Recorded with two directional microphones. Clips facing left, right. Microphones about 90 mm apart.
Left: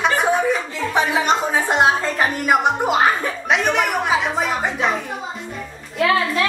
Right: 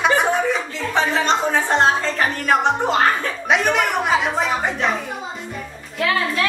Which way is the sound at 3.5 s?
Centre (ahead or behind).